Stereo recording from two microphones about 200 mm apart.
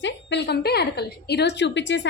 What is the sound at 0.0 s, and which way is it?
A woman's voice, 60° left (ahead or behind).